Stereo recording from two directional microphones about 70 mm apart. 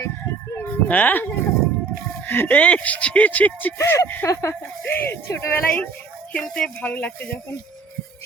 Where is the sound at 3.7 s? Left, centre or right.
Left.